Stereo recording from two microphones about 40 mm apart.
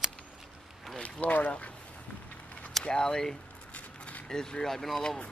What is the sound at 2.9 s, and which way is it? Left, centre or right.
Speech, centre.